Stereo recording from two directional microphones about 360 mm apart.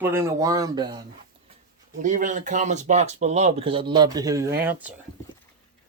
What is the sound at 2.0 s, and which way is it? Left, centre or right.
Speech, right.